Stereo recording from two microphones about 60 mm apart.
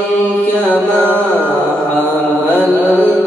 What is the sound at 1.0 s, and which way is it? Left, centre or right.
Music, right.